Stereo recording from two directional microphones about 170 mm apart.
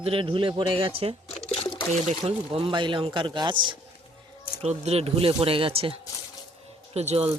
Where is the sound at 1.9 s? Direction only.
40° right (ahead or behind).